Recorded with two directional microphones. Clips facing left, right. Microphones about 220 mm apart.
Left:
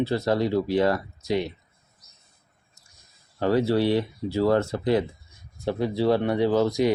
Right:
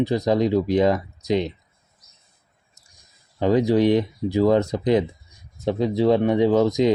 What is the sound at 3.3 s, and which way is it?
Speech, 15° right (ahead or behind).